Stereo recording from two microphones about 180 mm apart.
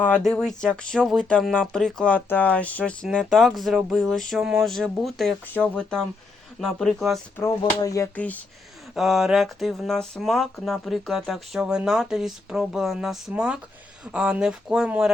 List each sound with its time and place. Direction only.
0.0 s speech: 5° left (ahead or behind)
7.6 s speech: 20° left (ahead or behind)
9.0 s speech: centre (ahead or behind)